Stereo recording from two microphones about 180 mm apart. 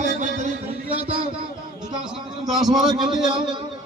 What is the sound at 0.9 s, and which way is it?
Speech, 30° right (ahead or behind).